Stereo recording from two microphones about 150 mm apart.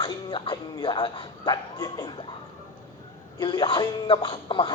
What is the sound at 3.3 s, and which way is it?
A man's voice, 30° left (ahead or behind).